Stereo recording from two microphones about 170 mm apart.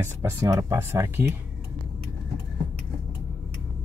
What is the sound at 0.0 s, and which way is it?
Speech, 20° right (ahead or behind).